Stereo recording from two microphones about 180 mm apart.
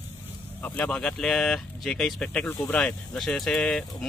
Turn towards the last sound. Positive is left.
turn(degrees=5)  # may be behind; listen again after turning